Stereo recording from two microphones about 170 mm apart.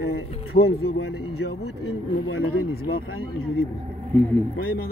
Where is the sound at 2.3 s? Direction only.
65° left (ahead or behind).